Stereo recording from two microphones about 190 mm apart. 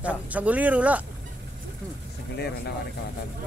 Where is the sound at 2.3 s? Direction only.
60° left (ahead or behind).